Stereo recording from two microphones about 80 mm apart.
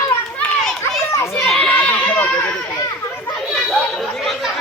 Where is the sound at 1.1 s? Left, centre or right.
Left.